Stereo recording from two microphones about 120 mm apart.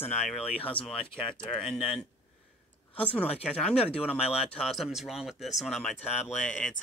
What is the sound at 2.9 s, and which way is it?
Speech, 10° left (ahead or behind).